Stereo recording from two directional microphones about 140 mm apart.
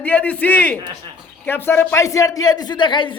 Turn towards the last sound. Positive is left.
turn(degrees=35)  # may be behind; listen again after turning